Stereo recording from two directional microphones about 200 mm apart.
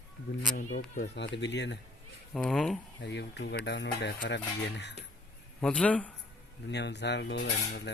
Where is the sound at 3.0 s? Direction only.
60° left (ahead or behind).